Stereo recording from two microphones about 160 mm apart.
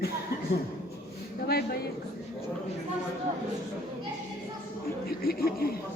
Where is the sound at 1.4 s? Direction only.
80° left.